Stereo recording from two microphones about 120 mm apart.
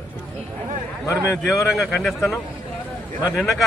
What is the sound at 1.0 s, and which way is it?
Speech, 25° left (ahead or behind).